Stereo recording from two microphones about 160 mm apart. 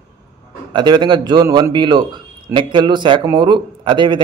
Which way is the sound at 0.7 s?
30° right (ahead or behind).